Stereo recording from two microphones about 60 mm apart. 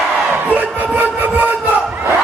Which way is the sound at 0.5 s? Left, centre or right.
Right.